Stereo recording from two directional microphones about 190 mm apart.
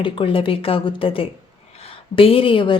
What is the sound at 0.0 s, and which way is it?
Speech, 30° left (ahead or behind).